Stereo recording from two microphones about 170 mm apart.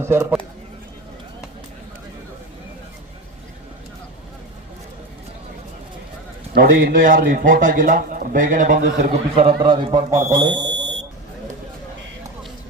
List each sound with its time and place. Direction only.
0.0 s speech: 15° right (ahead or behind)
6.5 s speech: 60° right (ahead or behind)
9.3 s a man's voice: 35° right (ahead or behind)